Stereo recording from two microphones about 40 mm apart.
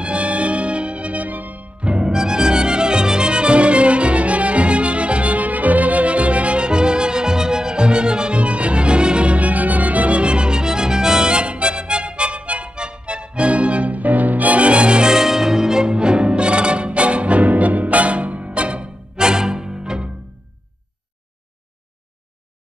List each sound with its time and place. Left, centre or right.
0.0 s music: right
1.8 s music: right